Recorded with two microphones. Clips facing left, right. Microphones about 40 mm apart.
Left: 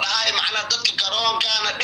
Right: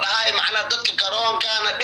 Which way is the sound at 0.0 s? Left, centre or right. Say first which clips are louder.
Right 1 dB; centre.